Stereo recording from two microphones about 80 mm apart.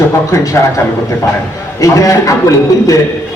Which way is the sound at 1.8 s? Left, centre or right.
Left.